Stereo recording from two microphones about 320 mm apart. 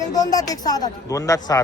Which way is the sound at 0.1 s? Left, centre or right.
Centre.